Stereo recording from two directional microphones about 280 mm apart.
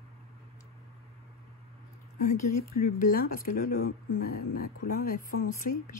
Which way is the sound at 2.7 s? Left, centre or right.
Left.